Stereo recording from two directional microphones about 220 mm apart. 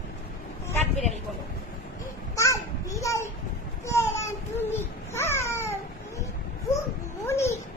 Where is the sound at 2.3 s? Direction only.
15° left (ahead or behind).